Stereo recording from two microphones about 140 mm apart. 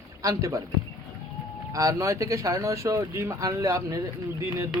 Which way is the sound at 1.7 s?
25° right (ahead or behind).